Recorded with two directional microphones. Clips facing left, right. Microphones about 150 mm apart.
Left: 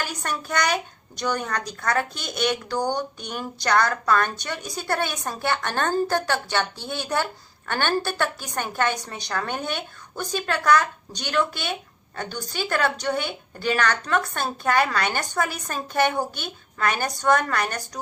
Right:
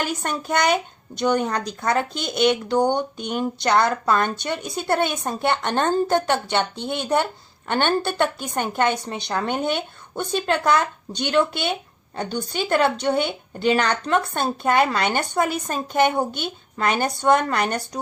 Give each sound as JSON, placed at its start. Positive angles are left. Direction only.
{"t": 0.0, "sound": "speech", "side_deg": -25}